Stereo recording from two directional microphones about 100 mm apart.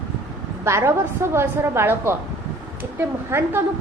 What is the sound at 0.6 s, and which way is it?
A woman's voice, 25° right (ahead or behind).